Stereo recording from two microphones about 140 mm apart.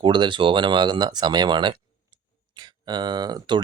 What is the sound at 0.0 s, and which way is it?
Speech, 35° right (ahead or behind).